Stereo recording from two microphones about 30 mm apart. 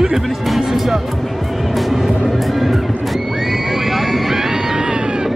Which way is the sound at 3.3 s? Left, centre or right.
Centre.